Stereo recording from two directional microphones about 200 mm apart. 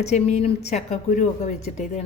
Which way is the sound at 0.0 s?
35° left (ahead or behind).